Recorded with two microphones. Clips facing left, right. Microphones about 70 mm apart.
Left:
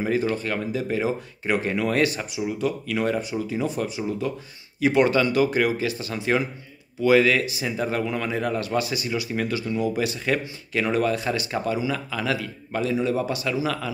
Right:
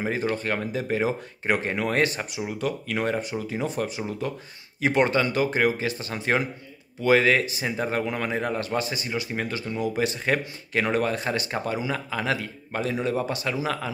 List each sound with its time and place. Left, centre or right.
0.0 s speech: right